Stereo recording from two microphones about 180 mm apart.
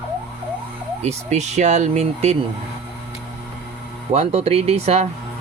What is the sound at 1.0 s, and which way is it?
Speech, 40° right (ahead or behind).